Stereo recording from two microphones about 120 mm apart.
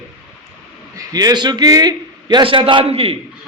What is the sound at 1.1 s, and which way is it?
A man's voice, 35° right (ahead or behind).